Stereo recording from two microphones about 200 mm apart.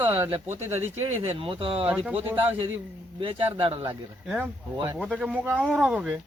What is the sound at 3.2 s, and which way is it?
Speech, 25° right (ahead or behind).